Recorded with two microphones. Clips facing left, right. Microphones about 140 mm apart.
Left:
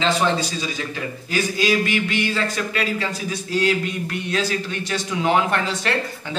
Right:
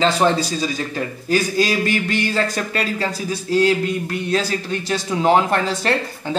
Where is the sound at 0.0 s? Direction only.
40° right (ahead or behind).